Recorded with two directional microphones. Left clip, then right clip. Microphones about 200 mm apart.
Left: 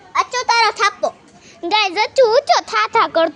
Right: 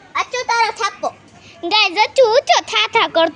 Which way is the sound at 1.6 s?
10° left (ahead or behind).